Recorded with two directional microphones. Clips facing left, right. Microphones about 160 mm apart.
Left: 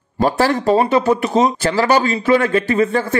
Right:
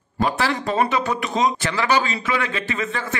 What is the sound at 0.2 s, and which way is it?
A man's voice, 40° left (ahead or behind).